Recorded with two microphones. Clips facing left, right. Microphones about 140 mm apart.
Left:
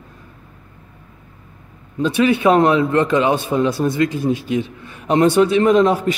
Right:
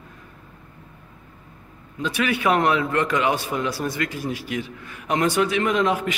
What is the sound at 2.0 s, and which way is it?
Speech, 25° left (ahead or behind).